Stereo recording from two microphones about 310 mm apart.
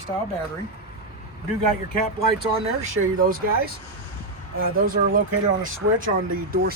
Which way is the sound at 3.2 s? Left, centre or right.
Right.